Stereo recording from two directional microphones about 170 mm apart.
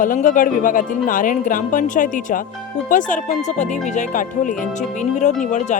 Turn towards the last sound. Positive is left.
turn(degrees=45)  # may be behind; listen again after turning